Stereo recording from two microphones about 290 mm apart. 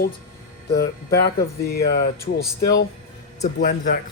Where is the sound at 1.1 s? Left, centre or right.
Left.